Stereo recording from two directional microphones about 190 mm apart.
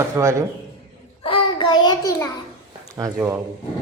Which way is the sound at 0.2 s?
15° right (ahead or behind).